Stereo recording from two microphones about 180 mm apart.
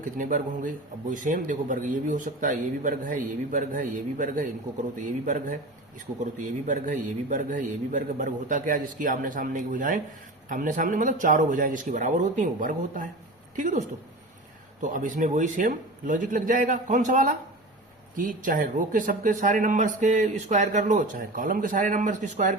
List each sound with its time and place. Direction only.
0.0 s speech: 45° right (ahead or behind)